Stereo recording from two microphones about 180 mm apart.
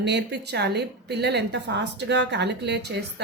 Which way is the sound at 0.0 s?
70° right (ahead or behind).